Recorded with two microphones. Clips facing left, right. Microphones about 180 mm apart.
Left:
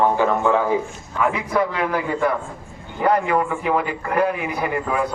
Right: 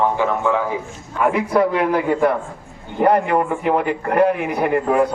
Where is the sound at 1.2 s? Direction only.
55° right (ahead or behind).